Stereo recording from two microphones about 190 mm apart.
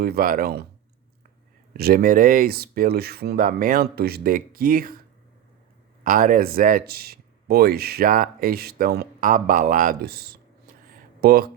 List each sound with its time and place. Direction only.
0.0 s speech: 50° right (ahead or behind)
1.7 s speech: 50° right (ahead or behind)
6.0 s speech: 45° right (ahead or behind)